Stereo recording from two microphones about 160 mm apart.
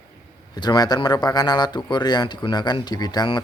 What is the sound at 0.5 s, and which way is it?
A man's voice, 25° left (ahead or behind).